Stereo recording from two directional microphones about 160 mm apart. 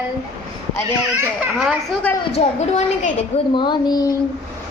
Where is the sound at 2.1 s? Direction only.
10° left (ahead or behind).